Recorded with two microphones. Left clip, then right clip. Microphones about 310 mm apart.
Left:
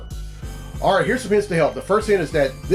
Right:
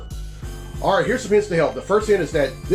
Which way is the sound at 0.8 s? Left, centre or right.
Left.